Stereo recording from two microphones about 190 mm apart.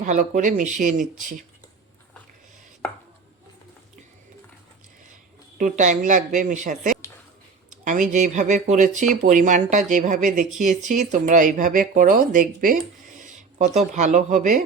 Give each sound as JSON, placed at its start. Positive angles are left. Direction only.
{"t": 0.0, "sound": "speech", "side_deg": -40}
{"t": 5.5, "sound": "speech", "side_deg": -40}
{"t": 7.7, "sound": "a sound", "side_deg": -45}
{"t": 8.1, "sound": "speech", "side_deg": -40}